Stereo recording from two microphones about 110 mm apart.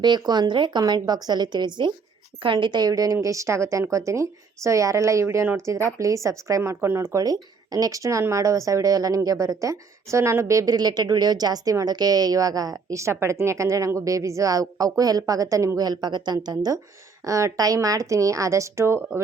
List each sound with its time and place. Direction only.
0.0 s a woman's voice: 40° right (ahead or behind); by 19.2 s 25° right (ahead or behind)